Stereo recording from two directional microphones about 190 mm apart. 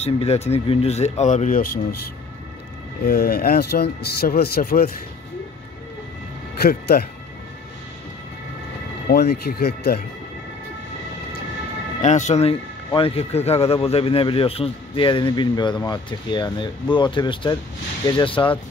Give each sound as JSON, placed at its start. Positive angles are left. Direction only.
{"t": 0.0, "sound": "speech", "side_deg": 35}
{"t": 3.1, "sound": "speech", "side_deg": 50}
{"t": 6.6, "sound": "speech", "side_deg": 55}
{"t": 9.1, "sound": "speech", "side_deg": 55}
{"t": 12.0, "sound": "speech", "side_deg": 40}